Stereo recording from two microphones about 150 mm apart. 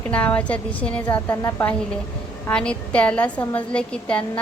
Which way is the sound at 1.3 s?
20° left (ahead or behind).